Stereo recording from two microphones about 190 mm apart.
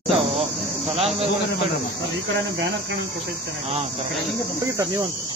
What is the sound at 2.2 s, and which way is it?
Speech, 75° right (ahead or behind).